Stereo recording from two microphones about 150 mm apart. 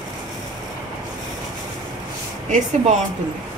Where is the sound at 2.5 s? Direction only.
50° right (ahead or behind).